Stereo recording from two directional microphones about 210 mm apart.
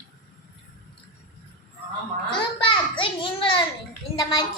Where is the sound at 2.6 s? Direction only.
25° left (ahead or behind).